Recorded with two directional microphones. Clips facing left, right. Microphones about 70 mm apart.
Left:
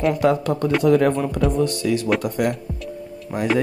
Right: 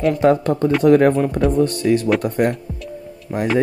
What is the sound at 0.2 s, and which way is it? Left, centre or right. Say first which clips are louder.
Speech: right 3 dB; right.